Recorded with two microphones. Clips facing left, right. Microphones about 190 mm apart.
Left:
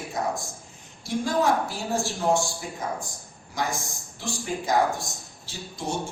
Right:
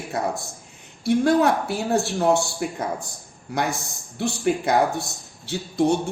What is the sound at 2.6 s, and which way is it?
Speech, 75° right (ahead or behind).